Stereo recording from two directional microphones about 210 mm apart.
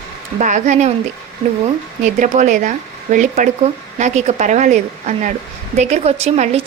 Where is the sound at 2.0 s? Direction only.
35° right (ahead or behind).